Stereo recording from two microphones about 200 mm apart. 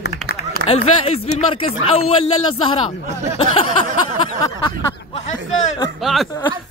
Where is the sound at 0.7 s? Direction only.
30° left (ahead or behind).